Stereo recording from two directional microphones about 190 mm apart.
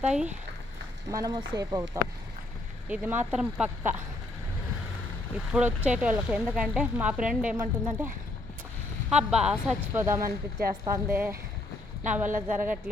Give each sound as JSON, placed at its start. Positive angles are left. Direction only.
{"t": 0.0, "sound": "speech", "side_deg": -5}
{"t": 1.1, "sound": "speech", "side_deg": -20}
{"t": 2.9, "sound": "speech", "side_deg": -10}
{"t": 5.5, "sound": "speech", "side_deg": -5}